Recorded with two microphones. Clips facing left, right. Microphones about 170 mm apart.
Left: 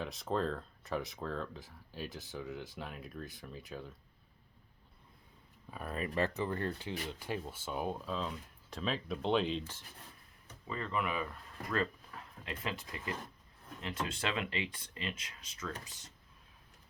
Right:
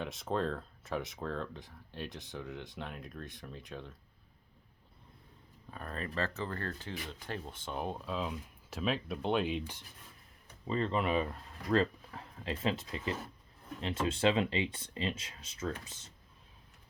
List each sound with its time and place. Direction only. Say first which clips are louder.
0.0 s speech: right 1 dB; centre (ahead or behind)
5.7 s speech: left 2 dB; 10° left (ahead or behind); by 9.8 s 15° right (ahead or behind)
10.7 s speech: right 5 dB; 30° right (ahead or behind)